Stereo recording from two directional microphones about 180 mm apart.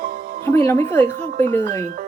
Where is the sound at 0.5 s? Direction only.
15° left (ahead or behind).